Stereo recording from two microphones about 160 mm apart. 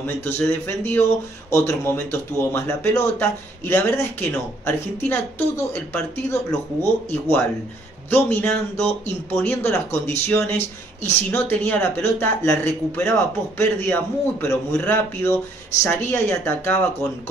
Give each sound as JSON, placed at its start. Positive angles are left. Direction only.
{"t": 0.4, "sound": "speech", "side_deg": 15}